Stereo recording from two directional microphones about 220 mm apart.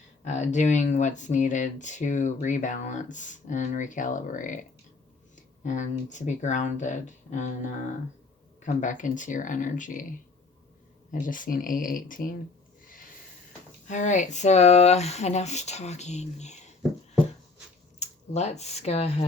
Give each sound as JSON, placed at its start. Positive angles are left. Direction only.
{"t": 0.3, "sound": "speech", "side_deg": 30}
{"t": 5.6, "sound": "speech", "side_deg": 35}
{"t": 11.1, "sound": "speech", "side_deg": 35}
{"t": 13.8, "sound": "speech", "side_deg": 35}
{"t": 18.0, "sound": "speech", "side_deg": 30}